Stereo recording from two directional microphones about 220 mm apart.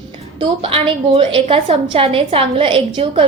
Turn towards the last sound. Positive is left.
turn(degrees=-25)  # may be behind; listen again after turning